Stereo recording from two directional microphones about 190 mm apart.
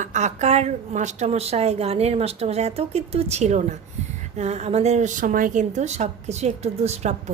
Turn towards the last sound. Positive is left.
turn(degrees=-35)  # may be behind; listen again after turning